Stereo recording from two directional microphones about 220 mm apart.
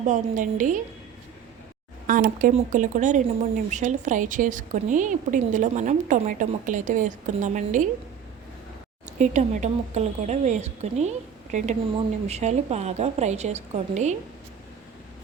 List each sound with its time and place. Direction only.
0.1 s speech: 35° right (ahead or behind)
2.0 s speech: 40° right (ahead or behind)
9.1 s speech: 35° right (ahead or behind)